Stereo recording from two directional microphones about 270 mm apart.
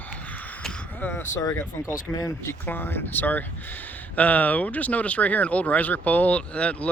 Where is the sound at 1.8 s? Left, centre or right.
Centre.